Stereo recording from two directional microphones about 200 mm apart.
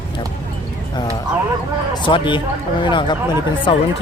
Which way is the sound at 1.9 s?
25° left (ahead or behind).